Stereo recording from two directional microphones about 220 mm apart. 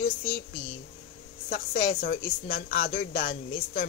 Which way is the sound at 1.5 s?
45° left (ahead or behind).